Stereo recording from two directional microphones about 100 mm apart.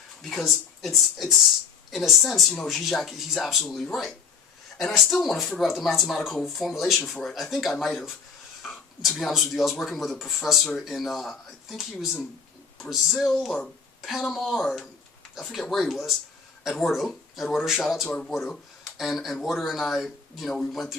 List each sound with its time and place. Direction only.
0.2 s speech: centre (ahead or behind)